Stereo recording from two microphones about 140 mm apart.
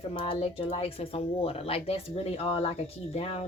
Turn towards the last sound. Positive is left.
turn(degrees=40)  # may be behind; listen again after turning